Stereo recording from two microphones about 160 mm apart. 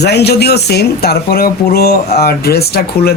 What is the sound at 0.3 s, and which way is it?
Speech, 90° left.